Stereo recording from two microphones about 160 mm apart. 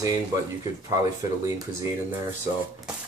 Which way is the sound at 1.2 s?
20° right (ahead or behind).